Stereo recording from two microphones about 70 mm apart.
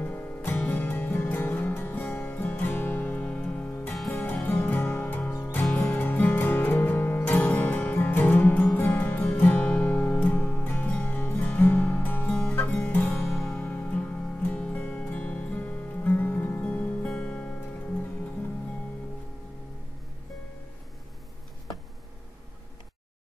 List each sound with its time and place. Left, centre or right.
0.0 s music: left
13.3 s music: centre
13.6 s music: left